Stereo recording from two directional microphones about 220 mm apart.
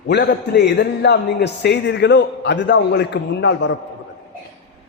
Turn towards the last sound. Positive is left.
turn(degrees=55)  # may be behind; listen again after turning